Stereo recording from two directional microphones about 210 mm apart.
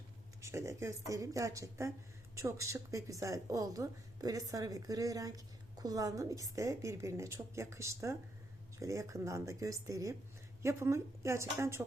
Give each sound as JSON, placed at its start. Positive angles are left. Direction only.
{"t": 0.4, "sound": "a woman's voice", "side_deg": -15}